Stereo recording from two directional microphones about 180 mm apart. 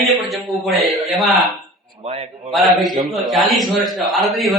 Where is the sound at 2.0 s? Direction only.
35° right (ahead or behind).